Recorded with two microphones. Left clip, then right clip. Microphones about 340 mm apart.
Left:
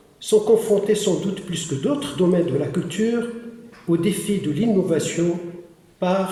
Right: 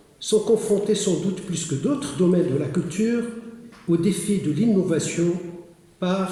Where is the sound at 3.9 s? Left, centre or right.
Left.